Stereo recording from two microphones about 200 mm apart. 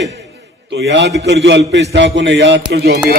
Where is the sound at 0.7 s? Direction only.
60° right (ahead or behind).